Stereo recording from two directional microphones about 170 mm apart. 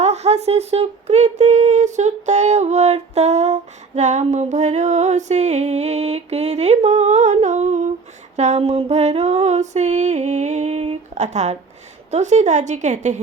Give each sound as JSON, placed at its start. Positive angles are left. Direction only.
{"t": 0.0, "sound": "a woman's voice", "side_deg": -40}